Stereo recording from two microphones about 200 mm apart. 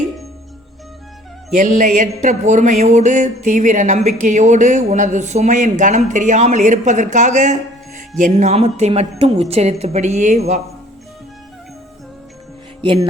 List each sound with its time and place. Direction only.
1.5 s music: 40° right (ahead or behind)